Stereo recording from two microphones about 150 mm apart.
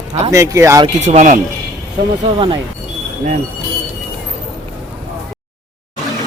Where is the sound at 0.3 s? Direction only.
20° right (ahead or behind).